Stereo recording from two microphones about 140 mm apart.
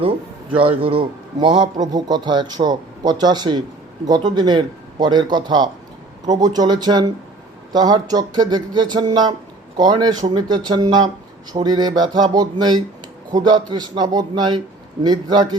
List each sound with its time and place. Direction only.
0.8 s a man's voice: 40° right (ahead or behind)